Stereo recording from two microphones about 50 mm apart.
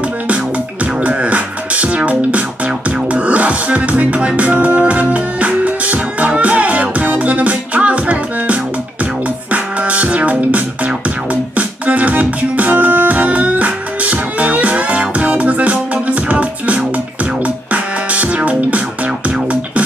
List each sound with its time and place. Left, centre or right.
1.0 s music: right
18.1 s music: right